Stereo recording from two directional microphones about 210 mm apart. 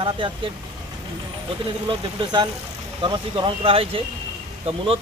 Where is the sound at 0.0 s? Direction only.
25° right (ahead or behind).